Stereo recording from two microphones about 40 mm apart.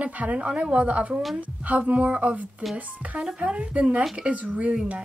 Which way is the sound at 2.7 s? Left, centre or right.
Right.